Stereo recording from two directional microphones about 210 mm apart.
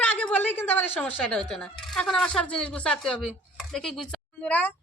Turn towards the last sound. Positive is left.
turn(degrees=5)  # may be behind; listen again after turning